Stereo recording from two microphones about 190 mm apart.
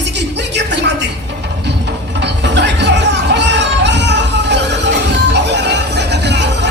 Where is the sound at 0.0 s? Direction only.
65° right (ahead or behind).